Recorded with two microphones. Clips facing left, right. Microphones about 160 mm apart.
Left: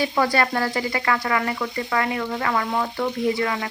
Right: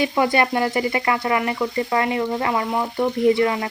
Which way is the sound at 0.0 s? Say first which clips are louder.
Right 2 dB; 20° right (ahead or behind).